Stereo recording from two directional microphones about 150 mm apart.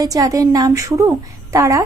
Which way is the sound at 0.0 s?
20° right (ahead or behind).